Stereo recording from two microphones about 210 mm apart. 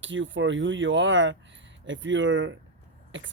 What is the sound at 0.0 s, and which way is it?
Speech, 65° right (ahead or behind).